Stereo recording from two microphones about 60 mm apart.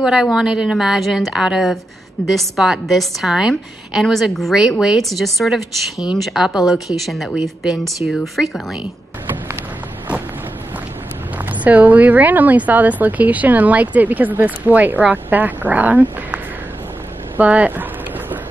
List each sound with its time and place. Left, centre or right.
0.0 s a woman's voice: centre
11.6 s speech: right
17.4 s speech: right